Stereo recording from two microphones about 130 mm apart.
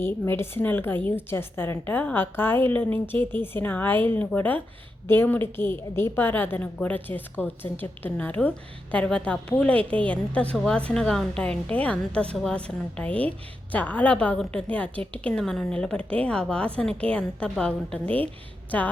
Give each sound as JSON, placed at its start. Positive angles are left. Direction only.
{"t": 0.0, "sound": "a woman's voice", "side_deg": 20}